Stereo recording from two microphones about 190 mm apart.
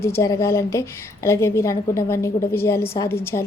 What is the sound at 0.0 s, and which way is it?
A woman's voice, 15° left (ahead or behind).